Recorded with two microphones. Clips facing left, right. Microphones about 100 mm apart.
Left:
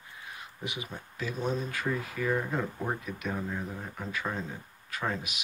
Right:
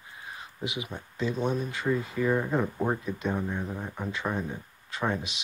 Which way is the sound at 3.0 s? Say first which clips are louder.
Right 4 dB; 30° right (ahead or behind).